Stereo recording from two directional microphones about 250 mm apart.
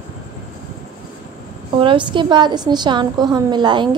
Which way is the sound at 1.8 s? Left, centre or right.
Centre.